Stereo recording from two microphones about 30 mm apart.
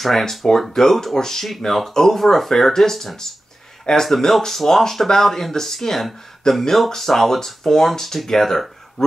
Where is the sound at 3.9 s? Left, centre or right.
Left.